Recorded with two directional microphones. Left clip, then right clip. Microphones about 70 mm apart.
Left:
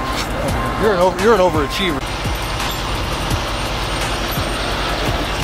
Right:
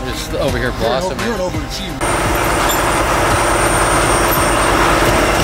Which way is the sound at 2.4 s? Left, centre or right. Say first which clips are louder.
Right 8 dB; right.